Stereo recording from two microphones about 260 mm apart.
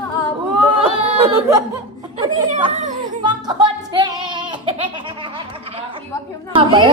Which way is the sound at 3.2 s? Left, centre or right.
Centre.